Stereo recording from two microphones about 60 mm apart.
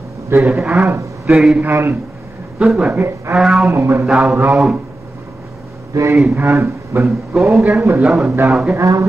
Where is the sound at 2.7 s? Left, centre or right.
Right.